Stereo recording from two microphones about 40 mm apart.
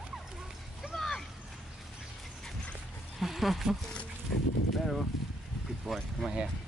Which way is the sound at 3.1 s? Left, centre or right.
Centre.